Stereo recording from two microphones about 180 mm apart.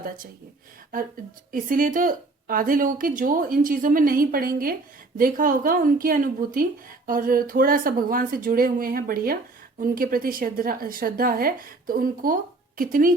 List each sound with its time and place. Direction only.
1.5 s a woman's voice: 50° right (ahead or behind)